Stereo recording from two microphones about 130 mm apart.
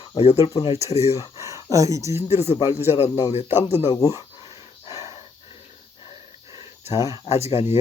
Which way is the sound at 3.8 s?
30° left (ahead or behind).